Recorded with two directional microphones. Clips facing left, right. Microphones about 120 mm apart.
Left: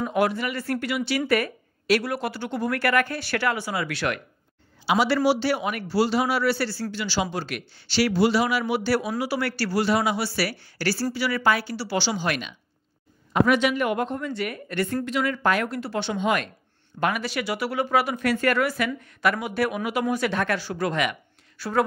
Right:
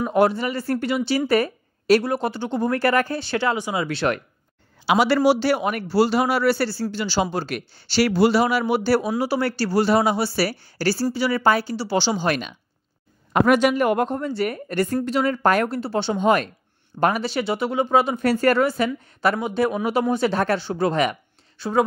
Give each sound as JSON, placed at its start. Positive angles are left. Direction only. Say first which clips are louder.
{"t": 0.1, "sound": "speech", "louder": "right 7 dB", "side_deg": -30}
{"t": 4.8, "sound": "a man's voice", "louder": "right 4 dB", "side_deg": -55}
{"t": 6.7, "sound": "speech", "louder": "right 4 dB", "side_deg": -30}
{"t": 9.2, "sound": "speech", "louder": "right 4 dB", "side_deg": -30}
{"t": 9.8, "sound": "speech", "louder": "right 4 dB", "side_deg": -35}
{"t": 15.7, "sound": "speech", "louder": "right 4 dB", "side_deg": -30}
{"t": 21.5, "sound": "speech", "louder": "right 3 dB", "side_deg": -20}